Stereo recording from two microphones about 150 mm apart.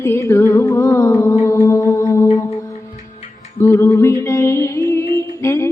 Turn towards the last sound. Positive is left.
turn(degrees=20)  # may be behind; listen again after turning